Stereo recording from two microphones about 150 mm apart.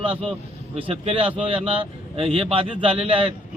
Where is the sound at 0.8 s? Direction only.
40° right (ahead or behind).